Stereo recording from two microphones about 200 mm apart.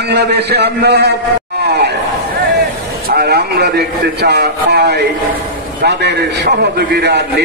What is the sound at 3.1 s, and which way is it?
A man's voice, 50° right (ahead or behind).